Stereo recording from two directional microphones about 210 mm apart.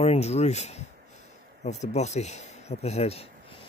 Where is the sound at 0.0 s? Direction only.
30° left (ahead or behind).